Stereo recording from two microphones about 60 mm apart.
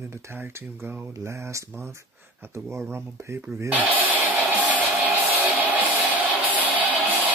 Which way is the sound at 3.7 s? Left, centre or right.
Right.